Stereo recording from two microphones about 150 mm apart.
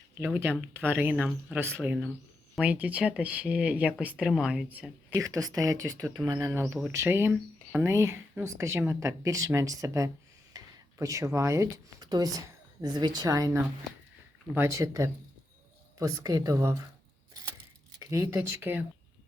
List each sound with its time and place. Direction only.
0.2 s speech: 15° right (ahead or behind)
5.1 s speech: 20° right (ahead or behind)
10.5 s a sound: 25° right (ahead or behind)
10.9 s speech: 20° right (ahead or behind)
18.0 s speech: 20° right (ahead or behind)